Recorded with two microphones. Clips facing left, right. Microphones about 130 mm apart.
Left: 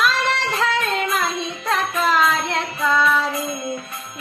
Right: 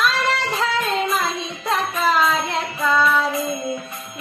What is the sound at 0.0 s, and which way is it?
Singing, centre (ahead or behind).